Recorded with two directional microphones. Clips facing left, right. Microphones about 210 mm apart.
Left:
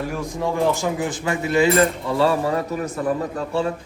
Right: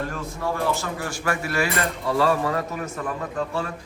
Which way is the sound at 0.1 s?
15° left (ahead or behind).